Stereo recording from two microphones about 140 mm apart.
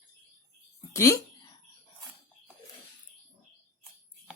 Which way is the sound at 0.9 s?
20° left (ahead or behind).